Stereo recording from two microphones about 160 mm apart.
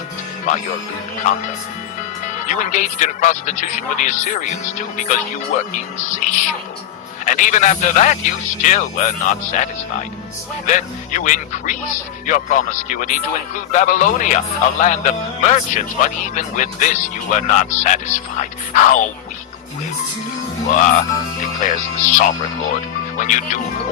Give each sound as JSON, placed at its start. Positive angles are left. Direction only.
{"t": 0.4, "sound": "speech", "side_deg": 50}
{"t": 10.7, "sound": "speech", "side_deg": 50}
{"t": 20.7, "sound": "speech", "side_deg": 50}